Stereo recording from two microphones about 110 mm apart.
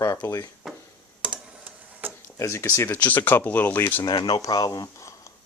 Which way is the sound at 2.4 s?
25° left (ahead or behind).